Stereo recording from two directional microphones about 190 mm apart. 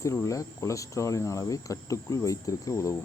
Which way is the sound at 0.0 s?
15° left (ahead or behind).